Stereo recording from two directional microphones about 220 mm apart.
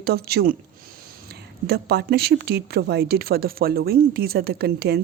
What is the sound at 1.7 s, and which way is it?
Speech, 45° right (ahead or behind).